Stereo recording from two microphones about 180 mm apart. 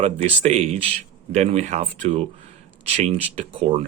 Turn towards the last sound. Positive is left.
turn(degrees=-35)  # may be behind; listen again after turning